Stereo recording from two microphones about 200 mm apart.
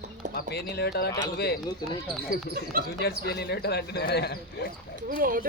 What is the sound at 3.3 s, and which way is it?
Speech, 55° left (ahead or behind).